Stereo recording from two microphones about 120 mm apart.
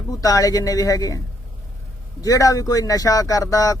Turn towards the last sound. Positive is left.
turn(degrees=30)  # may be behind; listen again after turning